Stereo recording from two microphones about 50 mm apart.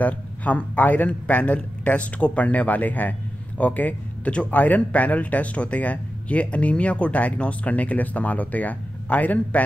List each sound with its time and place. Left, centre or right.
0.0 s speech: left